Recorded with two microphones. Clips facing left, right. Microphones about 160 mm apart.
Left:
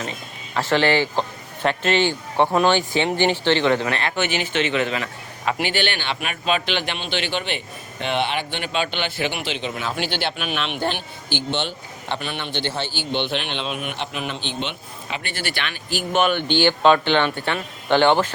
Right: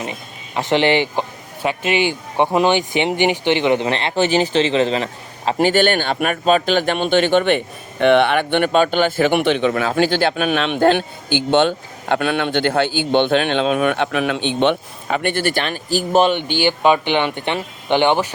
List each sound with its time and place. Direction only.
0.0 s speech: 15° right (ahead or behind)
5.5 s a man's voice: 45° right (ahead or behind)
12.0 s a man's voice: 55° right (ahead or behind)
14.1 s a man's voice: 65° right (ahead or behind); by 16.3 s 35° right (ahead or behind)
16.3 s speech: 10° right (ahead or behind)